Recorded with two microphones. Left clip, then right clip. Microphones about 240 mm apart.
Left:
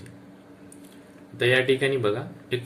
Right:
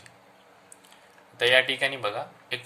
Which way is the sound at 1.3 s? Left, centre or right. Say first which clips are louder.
Even; right.